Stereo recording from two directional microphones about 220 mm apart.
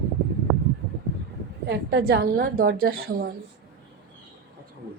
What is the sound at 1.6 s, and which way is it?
A woman's voice, 45° right (ahead or behind).